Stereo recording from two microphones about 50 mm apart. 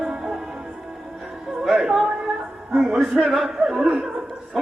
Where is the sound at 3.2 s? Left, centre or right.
Centre.